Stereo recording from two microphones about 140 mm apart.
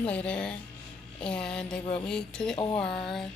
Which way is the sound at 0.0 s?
10° left (ahead or behind).